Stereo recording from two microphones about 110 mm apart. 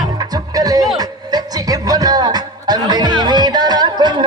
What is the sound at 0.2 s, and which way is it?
Music, 35° right (ahead or behind).